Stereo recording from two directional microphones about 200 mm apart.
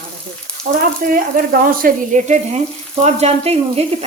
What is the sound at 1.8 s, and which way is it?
Speech, 35° right (ahead or behind).